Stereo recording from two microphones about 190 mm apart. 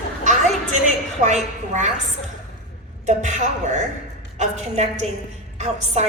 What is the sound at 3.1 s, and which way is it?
A woman's voice, 40° right (ahead or behind).